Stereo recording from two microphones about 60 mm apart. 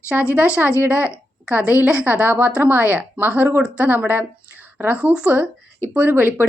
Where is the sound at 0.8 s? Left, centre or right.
Right.